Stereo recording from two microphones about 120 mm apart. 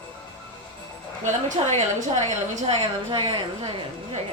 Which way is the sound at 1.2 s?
80° right.